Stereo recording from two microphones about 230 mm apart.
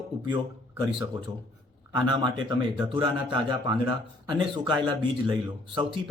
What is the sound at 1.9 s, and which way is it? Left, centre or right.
Speech, centre.